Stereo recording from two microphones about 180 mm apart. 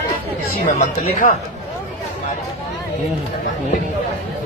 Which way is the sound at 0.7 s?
45° left (ahead or behind).